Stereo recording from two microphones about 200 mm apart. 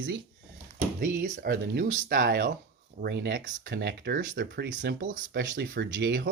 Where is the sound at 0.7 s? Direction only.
50° right (ahead or behind).